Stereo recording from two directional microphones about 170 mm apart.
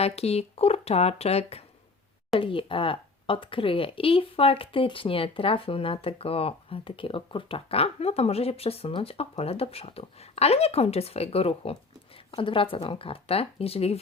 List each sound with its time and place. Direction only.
0.0 s speech: 35° left (ahead or behind)